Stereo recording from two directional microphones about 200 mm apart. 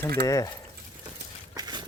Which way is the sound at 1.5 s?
20° right (ahead or behind).